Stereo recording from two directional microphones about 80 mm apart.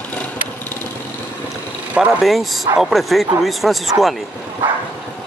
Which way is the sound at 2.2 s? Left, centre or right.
Centre.